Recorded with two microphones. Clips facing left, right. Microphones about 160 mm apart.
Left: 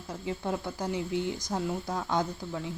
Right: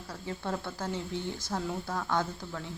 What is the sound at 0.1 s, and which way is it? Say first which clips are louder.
Speech: left 3 dB; 15° left (ahead or behind).